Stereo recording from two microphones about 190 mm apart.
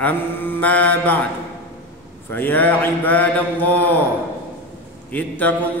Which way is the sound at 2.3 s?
10° left (ahead or behind).